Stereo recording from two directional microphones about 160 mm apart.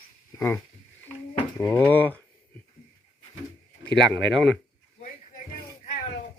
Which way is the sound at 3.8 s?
5° left (ahead or behind).